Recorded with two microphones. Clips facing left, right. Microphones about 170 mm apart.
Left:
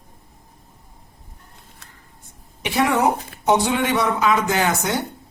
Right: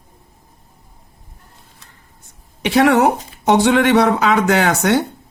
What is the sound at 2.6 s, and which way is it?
Speech, 75° right (ahead or behind).